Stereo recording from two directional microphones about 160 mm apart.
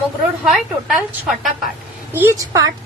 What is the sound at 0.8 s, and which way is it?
Speech, centre (ahead or behind).